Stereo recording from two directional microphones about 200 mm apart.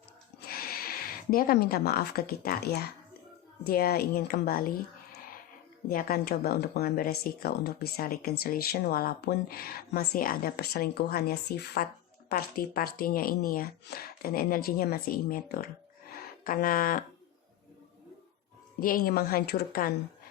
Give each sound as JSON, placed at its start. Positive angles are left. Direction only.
{"t": 0.4, "sound": "speech", "side_deg": 50}
{"t": 5.9, "sound": "speech", "side_deg": 45}
{"t": 18.8, "sound": "speech", "side_deg": 45}